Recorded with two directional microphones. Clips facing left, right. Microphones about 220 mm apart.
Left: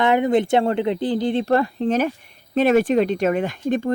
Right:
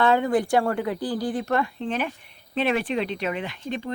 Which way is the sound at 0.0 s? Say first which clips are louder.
Left 3 dB; 20° left (ahead or behind).